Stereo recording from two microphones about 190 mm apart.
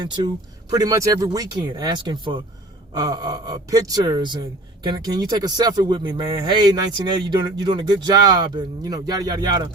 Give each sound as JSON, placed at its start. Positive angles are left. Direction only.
{"t": 0.7, "sound": "speech", "side_deg": -20}